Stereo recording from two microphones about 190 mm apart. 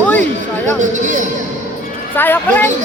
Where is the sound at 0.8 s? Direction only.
40° right (ahead or behind).